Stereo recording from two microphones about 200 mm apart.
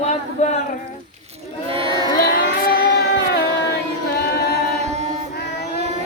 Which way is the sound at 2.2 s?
50° left (ahead or behind).